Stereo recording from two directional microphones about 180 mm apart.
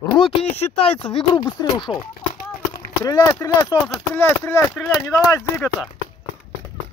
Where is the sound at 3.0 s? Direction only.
15° left (ahead or behind).